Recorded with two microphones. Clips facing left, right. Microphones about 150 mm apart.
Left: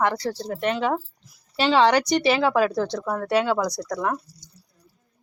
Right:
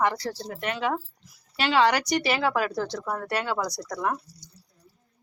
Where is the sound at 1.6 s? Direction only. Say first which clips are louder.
Left 4 dB; 30° left (ahead or behind).